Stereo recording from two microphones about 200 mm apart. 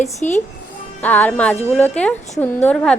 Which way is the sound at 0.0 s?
35° left (ahead or behind).